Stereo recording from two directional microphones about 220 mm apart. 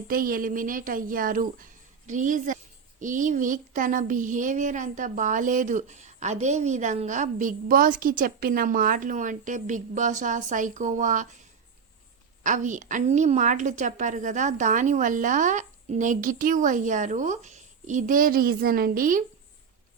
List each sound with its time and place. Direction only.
0.1 s speech: 40° right (ahead or behind)
12.4 s speech: 35° right (ahead or behind)